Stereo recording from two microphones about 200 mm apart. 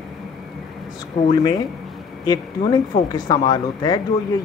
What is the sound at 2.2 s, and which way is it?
Speech, 20° left (ahead or behind).